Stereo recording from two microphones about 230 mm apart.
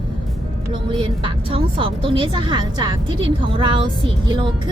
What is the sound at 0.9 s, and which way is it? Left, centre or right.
A woman's voice, right.